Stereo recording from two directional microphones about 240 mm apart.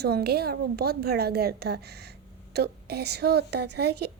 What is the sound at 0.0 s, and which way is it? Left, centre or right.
A woman's voice, right.